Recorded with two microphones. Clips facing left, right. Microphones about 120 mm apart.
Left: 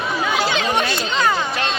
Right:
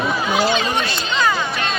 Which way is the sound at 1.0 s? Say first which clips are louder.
Even; 40° left (ahead or behind).